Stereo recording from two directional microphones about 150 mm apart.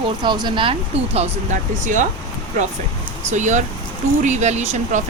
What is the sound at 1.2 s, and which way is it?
Speech, 55° right (ahead or behind).